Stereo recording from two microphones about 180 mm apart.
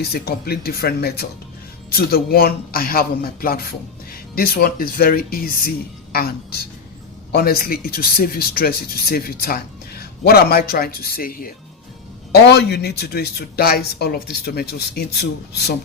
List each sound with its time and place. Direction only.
0.0 s speech: 60° left (ahead or behind)
12.3 s speech: 65° left (ahead or behind)